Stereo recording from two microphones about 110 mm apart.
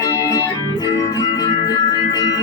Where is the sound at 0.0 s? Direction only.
35° left (ahead or behind).